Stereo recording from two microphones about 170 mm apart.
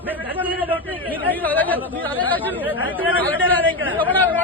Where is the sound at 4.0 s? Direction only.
10° left (ahead or behind).